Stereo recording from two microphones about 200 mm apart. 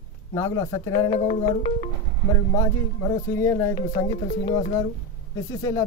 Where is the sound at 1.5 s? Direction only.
30° left (ahead or behind).